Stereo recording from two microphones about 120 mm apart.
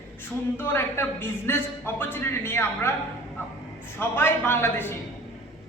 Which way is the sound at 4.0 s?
20° left (ahead or behind).